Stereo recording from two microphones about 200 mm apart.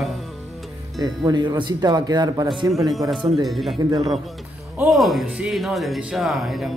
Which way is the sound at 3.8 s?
20° right (ahead or behind).